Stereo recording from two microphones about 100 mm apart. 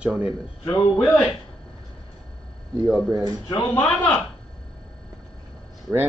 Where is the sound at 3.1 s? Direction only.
40° right (ahead or behind).